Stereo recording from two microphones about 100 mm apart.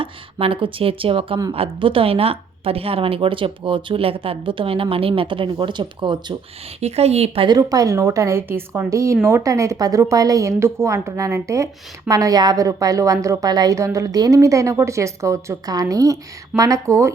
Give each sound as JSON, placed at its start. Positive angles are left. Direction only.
{"t": 0.0, "sound": "a woman's voice", "side_deg": -65}
{"t": 6.7, "sound": "speech", "side_deg": -90}
{"t": 7.4, "sound": "a woman's voice", "side_deg": -40}